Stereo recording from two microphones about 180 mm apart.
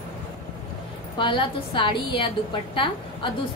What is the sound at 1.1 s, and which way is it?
A woman's voice, 30° left (ahead or behind).